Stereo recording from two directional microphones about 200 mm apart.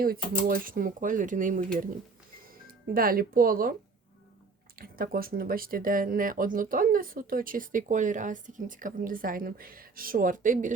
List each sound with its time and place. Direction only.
0.0 s speech: 45° right (ahead or behind)
4.8 s speech: 45° right (ahead or behind)